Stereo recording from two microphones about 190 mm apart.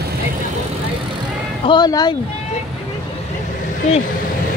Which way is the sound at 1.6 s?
20° left (ahead or behind).